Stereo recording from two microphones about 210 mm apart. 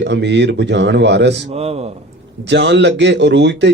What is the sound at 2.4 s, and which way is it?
Speech, 55° right (ahead or behind).